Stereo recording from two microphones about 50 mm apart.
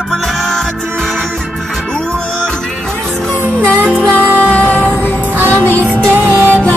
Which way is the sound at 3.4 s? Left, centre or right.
Right.